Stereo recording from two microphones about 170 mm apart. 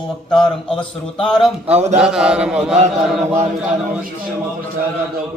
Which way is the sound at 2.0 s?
5° right (ahead or behind).